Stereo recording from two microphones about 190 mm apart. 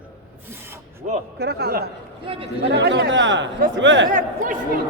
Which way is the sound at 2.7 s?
65° right (ahead or behind).